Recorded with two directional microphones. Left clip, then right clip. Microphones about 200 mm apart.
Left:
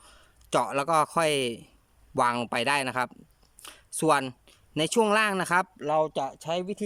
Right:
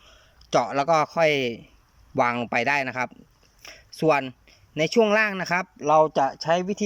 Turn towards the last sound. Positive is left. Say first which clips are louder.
# right 8 dB
turn(degrees=0)  # may be behind; listen again after turning